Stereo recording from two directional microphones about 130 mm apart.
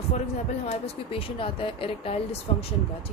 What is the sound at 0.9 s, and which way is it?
Speech, 45° left (ahead or behind).